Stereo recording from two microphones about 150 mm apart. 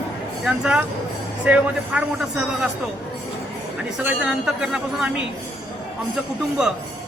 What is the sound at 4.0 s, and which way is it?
Speech, 5° right (ahead or behind).